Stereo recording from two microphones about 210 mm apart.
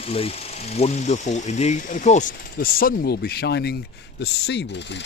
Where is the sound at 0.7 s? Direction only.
30° left (ahead or behind).